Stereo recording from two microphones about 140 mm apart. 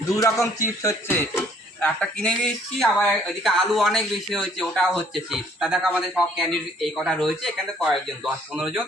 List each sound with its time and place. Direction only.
0.2 s a man's voice: 25° left (ahead or behind); by 8.8 s 10° right (ahead or behind)